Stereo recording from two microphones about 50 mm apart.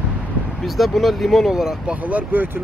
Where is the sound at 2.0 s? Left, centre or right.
Right.